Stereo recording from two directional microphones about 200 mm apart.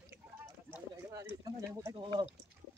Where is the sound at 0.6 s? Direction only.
10° right (ahead or behind).